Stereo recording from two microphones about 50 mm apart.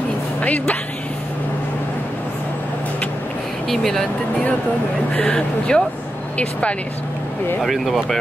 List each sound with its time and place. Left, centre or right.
0.4 s speech: left
3.6 s speech: centre
5.2 s speech: centre
7.6 s speech: centre